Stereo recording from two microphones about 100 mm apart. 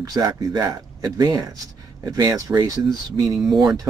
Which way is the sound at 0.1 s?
40° right (ahead or behind).